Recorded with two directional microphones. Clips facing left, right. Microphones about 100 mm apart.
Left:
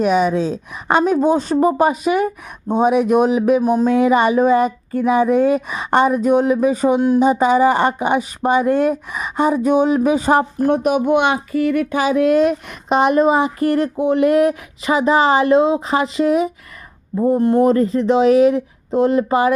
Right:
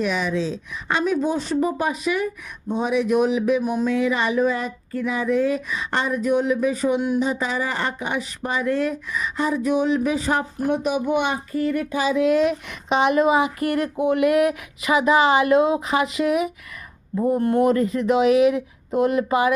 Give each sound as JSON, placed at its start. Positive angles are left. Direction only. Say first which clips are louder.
{"t": 0.0, "sound": "speech", "louder": "left 7 dB", "side_deg": 45}